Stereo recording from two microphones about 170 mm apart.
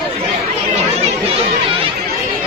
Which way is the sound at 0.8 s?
40° right (ahead or behind).